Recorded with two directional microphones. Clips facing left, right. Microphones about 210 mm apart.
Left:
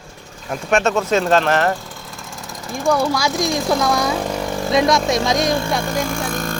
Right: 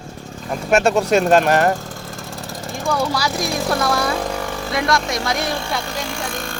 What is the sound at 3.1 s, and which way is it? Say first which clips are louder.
Speech: left 2 dB; 15° left (ahead or behind).